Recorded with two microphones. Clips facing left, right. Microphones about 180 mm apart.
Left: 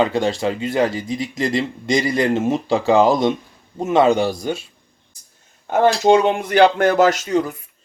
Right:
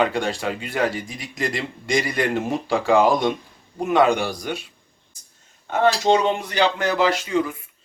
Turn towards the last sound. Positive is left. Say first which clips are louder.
# left 4 dB
turn(degrees=40)  # may be behind; listen again after turning